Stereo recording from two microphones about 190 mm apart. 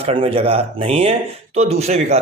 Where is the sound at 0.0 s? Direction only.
30° right (ahead or behind).